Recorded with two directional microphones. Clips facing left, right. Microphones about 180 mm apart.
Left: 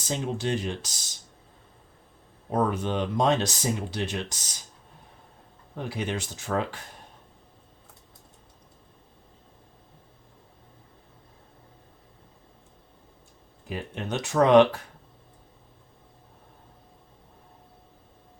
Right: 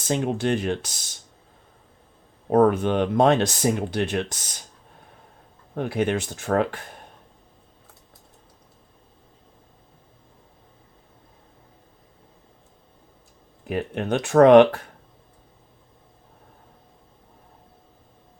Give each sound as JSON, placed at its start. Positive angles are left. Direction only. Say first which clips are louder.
{"t": 0.1, "sound": "speech", "louder": "right 5 dB", "side_deg": -60}
{"t": 2.5, "sound": "speech", "louder": "right 8 dB", "side_deg": -55}
{"t": 5.7, "sound": "speech", "louder": "right 8 dB", "side_deg": -60}
{"t": 13.7, "sound": "speech", "louder": "right 7 dB", "side_deg": -60}